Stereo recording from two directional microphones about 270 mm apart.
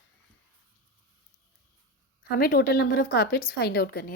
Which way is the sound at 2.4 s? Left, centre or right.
Left.